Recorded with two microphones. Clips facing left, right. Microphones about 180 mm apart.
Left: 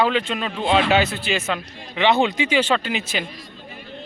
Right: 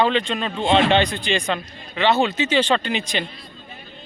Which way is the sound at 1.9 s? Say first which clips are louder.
Left 1 dB; 15° left (ahead or behind).